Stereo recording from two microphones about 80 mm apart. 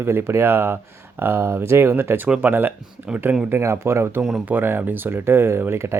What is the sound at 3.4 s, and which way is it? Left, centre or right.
Speech, right.